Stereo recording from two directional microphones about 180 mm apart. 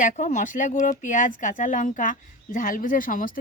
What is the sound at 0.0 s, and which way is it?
Speech, 40° left (ahead or behind).